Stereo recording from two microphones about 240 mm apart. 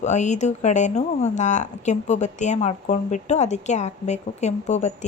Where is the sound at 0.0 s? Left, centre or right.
Left.